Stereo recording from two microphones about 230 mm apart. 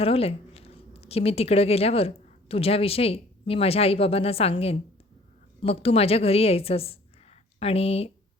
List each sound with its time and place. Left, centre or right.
0.0 s a woman's voice: left
5.8 s a woman's voice: left